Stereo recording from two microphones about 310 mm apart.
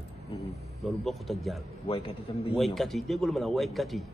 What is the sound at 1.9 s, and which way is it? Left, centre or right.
Speech, centre.